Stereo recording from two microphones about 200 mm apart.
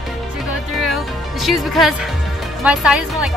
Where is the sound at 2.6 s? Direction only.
5° right (ahead or behind).